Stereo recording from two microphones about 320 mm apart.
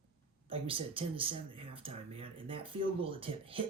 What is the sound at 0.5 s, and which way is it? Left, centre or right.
Speech, centre.